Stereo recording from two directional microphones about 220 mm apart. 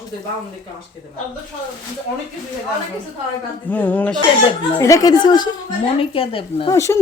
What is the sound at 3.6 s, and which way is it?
A woman's voice, 10° left (ahead or behind).